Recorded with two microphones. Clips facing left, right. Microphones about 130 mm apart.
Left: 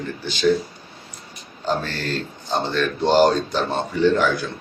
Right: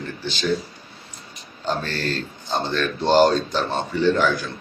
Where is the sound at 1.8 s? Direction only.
10° left (ahead or behind).